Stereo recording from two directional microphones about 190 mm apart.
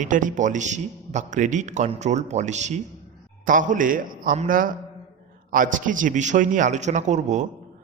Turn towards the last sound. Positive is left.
turn(degrees=-40)  # may be behind; listen again after turning